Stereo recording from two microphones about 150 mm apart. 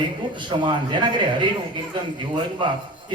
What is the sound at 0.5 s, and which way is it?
Speech, 35° right (ahead or behind).